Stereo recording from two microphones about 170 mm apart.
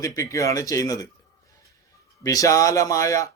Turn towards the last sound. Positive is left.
turn(degrees=20)  # may be behind; listen again after turning